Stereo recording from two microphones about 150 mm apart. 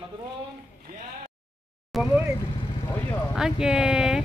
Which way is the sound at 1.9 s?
5° right (ahead or behind).